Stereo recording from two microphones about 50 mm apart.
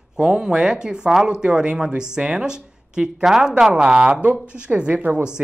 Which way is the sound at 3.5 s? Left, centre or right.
Right.